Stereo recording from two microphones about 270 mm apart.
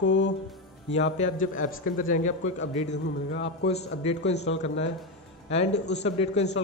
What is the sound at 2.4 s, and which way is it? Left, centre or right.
A man's voice, left.